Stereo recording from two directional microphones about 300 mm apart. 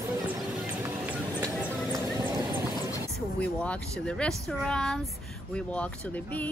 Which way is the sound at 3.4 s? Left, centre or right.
Centre.